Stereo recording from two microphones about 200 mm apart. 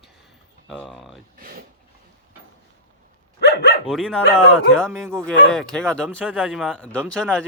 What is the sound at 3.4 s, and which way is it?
Dog, 55° left (ahead or behind).